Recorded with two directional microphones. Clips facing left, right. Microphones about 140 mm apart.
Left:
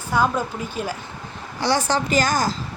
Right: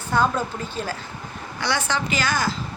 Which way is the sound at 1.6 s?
35° left (ahead or behind).